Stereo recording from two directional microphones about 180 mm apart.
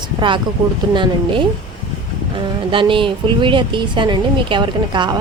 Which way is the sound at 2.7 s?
30° right (ahead or behind).